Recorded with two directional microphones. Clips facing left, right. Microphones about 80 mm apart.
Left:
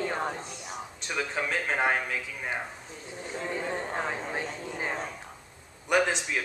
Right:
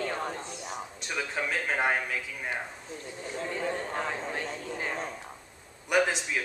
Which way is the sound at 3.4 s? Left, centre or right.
Centre.